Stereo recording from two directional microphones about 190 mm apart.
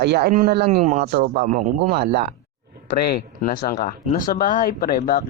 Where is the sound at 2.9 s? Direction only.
55° left (ahead or behind).